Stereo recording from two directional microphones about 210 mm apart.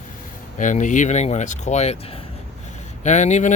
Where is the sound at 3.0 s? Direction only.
35° left (ahead or behind).